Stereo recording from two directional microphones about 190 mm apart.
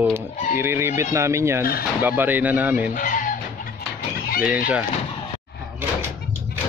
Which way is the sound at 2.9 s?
45° left (ahead or behind).